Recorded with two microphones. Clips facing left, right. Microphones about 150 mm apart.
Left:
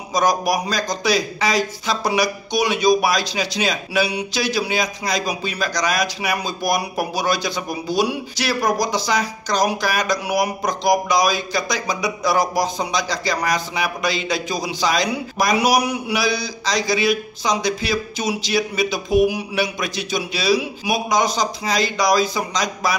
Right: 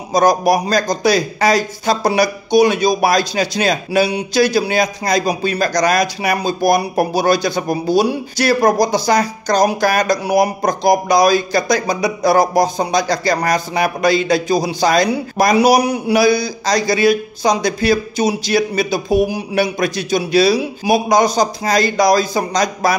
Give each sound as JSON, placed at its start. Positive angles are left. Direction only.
{"t": 0.2, "sound": "speech", "side_deg": -55}
{"t": 8.5, "sound": "a man's voice", "side_deg": -55}
{"t": 16.2, "sound": "a man's voice", "side_deg": -50}
{"t": 19.5, "sound": "speech", "side_deg": -50}